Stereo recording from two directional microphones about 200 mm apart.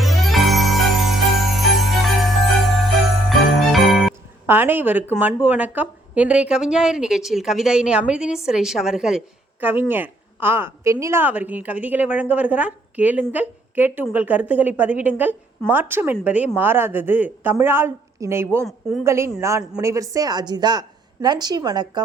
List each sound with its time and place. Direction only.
0.0 s music: centre (ahead or behind)
2.6 s jingle bell: centre (ahead or behind)
4.4 s a woman's voice: 10° right (ahead or behind)